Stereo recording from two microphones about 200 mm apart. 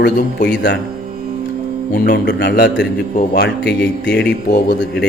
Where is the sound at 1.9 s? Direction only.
50° left (ahead or behind).